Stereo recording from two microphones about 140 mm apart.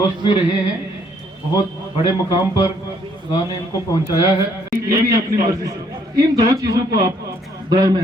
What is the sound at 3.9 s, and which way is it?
Speech, 30° left (ahead or behind).